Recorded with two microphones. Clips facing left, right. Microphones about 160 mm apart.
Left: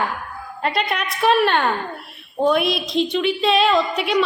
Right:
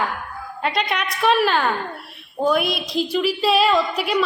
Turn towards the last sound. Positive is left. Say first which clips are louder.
# left 1 dB
turn(degrees=0)  # may be behind; listen again after turning